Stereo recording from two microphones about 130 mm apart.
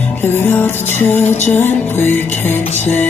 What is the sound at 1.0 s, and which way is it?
Music, 15° left (ahead or behind).